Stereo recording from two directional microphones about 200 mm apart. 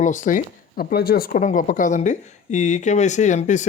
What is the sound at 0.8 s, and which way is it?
Speech, 50° left (ahead or behind).